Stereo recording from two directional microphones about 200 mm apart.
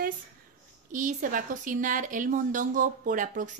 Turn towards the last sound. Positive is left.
turn(degrees=-40)  # may be behind; listen again after turning